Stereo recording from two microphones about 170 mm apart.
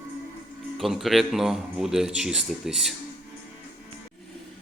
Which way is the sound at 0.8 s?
Centre (ahead or behind).